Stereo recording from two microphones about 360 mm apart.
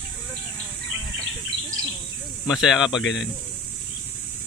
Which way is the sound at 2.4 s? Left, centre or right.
Centre.